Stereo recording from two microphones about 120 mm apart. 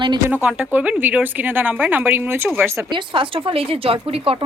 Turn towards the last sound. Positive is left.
turn(degrees=-50)  # may be behind; listen again after turning